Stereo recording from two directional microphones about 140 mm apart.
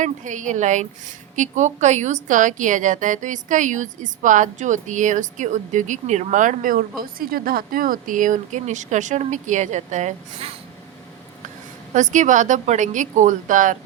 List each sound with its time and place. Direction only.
0.0 s a woman's voice: 60° right (ahead or behind)
11.9 s a woman's voice: 60° right (ahead or behind)